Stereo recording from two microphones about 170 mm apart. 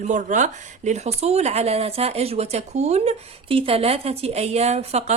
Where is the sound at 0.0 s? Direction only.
45° right (ahead or behind).